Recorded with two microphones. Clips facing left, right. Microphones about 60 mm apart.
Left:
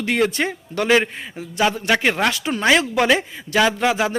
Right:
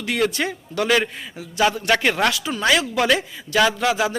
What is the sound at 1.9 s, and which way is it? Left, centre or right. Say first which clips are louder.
Speech: even; centre.